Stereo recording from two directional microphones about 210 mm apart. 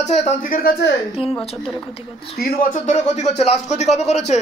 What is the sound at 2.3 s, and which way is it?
A man's voice, 45° left (ahead or behind).